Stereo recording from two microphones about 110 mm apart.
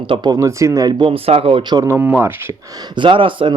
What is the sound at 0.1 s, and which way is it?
Speech, 45° right (ahead or behind).